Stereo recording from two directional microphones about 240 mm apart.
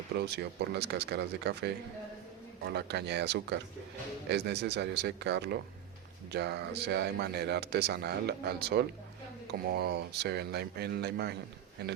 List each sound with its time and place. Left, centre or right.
0.2 s speech: right